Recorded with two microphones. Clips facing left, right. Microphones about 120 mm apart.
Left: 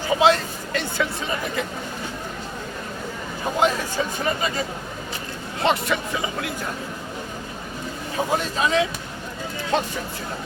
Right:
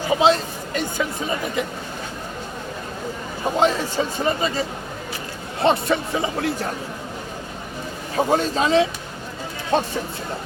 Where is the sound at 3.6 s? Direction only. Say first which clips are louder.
Right 2 dB; 25° right (ahead or behind).